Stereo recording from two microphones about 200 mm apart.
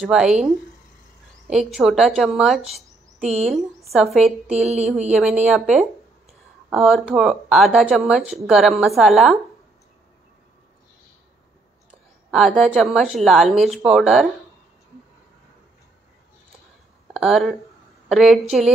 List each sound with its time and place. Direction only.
0.0 s a woman's voice: 5° right (ahead or behind)
1.5 s a woman's voice: centre (ahead or behind)
4.5 s speech: 35° right (ahead or behind)
5.5 s a woman's voice: centre (ahead or behind)
11.9 s a woman's voice: centre (ahead or behind)
17.1 s a woman's voice: centre (ahead or behind)